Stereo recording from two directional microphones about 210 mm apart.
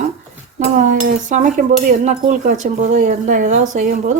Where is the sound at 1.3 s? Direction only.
35° right (ahead or behind).